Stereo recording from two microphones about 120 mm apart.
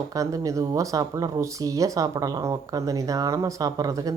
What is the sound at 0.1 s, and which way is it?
Speech, 30° right (ahead or behind).